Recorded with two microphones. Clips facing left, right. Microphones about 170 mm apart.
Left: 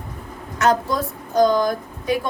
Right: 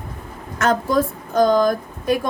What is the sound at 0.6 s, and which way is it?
A woman's voice, 50° right (ahead or behind).